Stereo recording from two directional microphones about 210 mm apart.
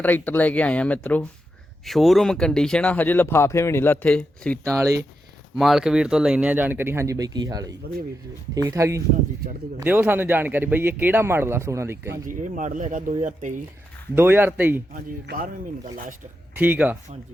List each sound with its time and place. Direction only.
0.0 s speech: 10° left (ahead or behind); by 12.2 s 10° right (ahead or behind)
12.2 s speech: 40° right (ahead or behind)
14.2 s speech: 10° right (ahead or behind)
14.9 s speech: 40° right (ahead or behind)
16.6 s speech: 5° right (ahead or behind)